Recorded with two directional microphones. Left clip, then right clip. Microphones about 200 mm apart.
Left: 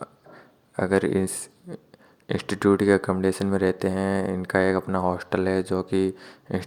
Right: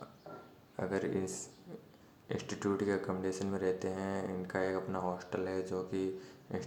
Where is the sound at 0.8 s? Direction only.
45° left (ahead or behind).